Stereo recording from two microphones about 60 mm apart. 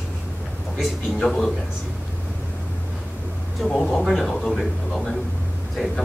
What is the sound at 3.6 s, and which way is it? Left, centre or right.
A man's voice, centre.